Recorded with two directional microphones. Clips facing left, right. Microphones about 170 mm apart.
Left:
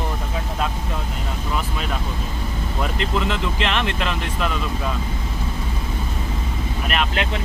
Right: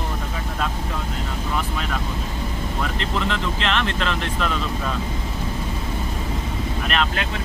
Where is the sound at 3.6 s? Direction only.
15° left (ahead or behind).